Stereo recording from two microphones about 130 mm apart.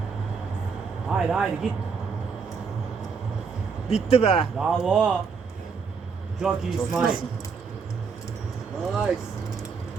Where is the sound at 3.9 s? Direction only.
50° left (ahead or behind).